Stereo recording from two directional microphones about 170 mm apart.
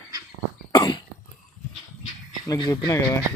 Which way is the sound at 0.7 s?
25° left (ahead or behind).